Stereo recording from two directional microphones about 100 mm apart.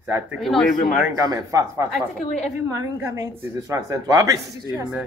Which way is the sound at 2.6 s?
35° right (ahead or behind).